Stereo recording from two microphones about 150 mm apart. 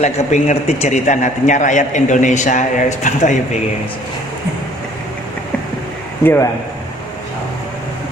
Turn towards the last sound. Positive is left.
turn(degrees=15)  # may be behind; listen again after turning